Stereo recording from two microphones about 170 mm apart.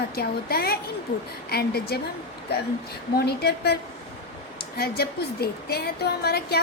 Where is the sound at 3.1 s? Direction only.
70° left (ahead or behind).